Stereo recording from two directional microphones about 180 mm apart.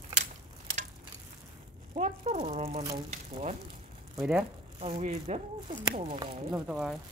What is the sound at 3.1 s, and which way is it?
Speech, 35° right (ahead or behind).